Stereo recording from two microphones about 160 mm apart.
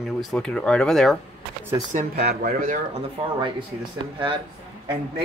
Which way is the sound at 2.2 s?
80° right.